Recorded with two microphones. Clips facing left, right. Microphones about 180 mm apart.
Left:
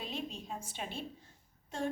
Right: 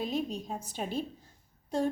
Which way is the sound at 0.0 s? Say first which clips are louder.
Right 8 dB; 40° right (ahead or behind).